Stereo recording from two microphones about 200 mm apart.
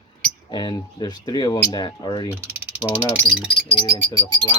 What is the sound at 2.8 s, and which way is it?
Speech, 10° right (ahead or behind).